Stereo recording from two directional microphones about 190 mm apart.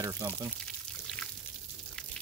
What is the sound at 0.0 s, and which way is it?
Speech, 15° right (ahead or behind).